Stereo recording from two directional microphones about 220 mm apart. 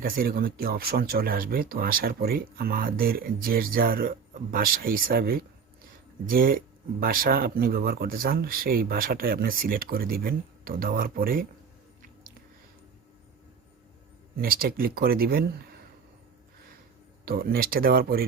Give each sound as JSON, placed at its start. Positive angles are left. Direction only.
{"t": 0.0, "sound": "speech", "side_deg": -45}
{"t": 14.3, "sound": "speech", "side_deg": -40}
{"t": 17.2, "sound": "speech", "side_deg": -45}